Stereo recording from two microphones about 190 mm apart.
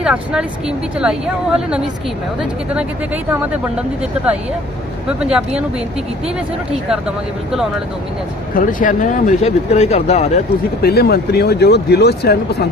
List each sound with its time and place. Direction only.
0.0 s speech: 5° right (ahead or behind)
8.5 s speech: 45° left (ahead or behind)
10.8 s speech: 55° left (ahead or behind)